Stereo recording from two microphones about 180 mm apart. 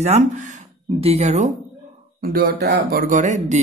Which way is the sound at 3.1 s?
45° right (ahead or behind).